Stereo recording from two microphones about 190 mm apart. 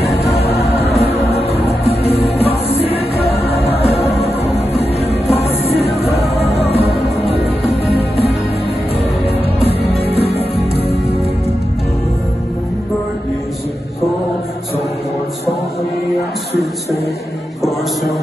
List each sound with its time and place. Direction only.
0.0 s music: 35° left (ahead or behind)
5.3 s music: 35° left (ahead or behind)
9.6 s music: 30° left (ahead or behind)